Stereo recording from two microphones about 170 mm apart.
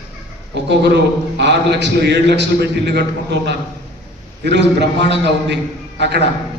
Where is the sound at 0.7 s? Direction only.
85° right.